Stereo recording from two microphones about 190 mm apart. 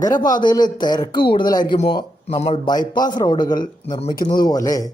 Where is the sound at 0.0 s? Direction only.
20° left (ahead or behind).